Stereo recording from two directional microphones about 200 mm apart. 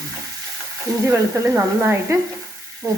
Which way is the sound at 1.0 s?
15° right (ahead or behind).